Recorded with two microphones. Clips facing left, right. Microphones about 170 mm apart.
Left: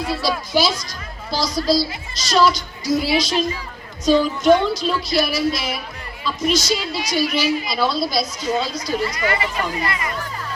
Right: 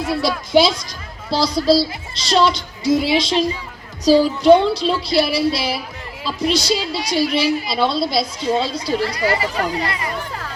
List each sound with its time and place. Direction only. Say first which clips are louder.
0.2 s a woman's voice: right 7 dB; 25° right (ahead or behind)